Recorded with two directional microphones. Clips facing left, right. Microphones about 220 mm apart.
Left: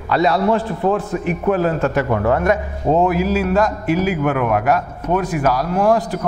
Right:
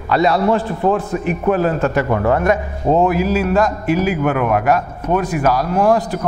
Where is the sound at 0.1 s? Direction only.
15° right (ahead or behind).